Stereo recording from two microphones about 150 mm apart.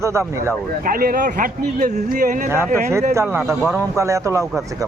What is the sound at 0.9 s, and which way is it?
Speech, 75° right (ahead or behind).